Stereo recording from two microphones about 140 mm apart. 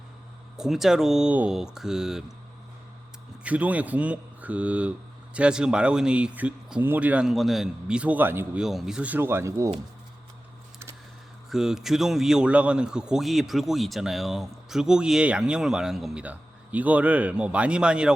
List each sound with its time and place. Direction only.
0.5 s a man's voice: 5° right (ahead or behind)
3.4 s speech: 10° right (ahead or behind)
8.6 s speech: 5° right (ahead or behind); by 9.7 s 20° right (ahead or behind)
11.4 s a man's voice: 5° right (ahead or behind)